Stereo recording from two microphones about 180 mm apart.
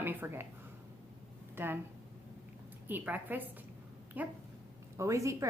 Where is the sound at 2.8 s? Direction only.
10° right (ahead or behind).